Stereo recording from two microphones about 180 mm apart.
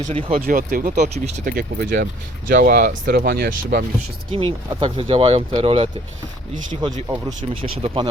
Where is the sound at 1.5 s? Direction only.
60° right (ahead or behind).